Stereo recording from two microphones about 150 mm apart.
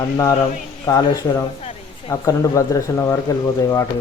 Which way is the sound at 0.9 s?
25° left (ahead or behind).